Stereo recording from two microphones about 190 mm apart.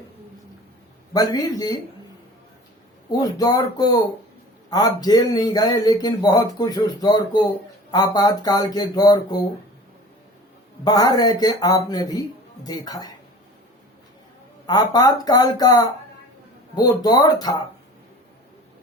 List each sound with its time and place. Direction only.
1.1 s speech: 20° left (ahead or behind)
3.1 s speech: 20° left (ahead or behind)
10.8 s speech: 20° left (ahead or behind)
14.7 s speech: 20° left (ahead or behind)
17.0 s speech: 20° left (ahead or behind)